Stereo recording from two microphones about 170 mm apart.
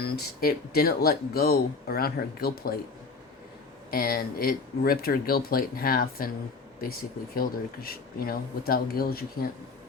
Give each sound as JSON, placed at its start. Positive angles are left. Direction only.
{"t": 0.4, "sound": "speech", "side_deg": 65}
{"t": 3.9, "sound": "speech", "side_deg": 60}
{"t": 7.3, "sound": "speech", "side_deg": 60}